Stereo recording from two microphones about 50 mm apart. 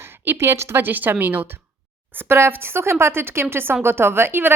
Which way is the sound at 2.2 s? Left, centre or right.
Right.